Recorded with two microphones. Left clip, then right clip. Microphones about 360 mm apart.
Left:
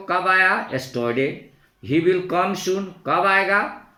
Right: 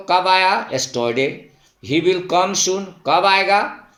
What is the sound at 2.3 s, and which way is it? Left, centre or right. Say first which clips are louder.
Speech: right 4 dB; centre.